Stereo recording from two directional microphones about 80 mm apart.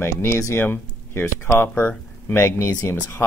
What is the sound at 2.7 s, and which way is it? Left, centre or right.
Speech, left.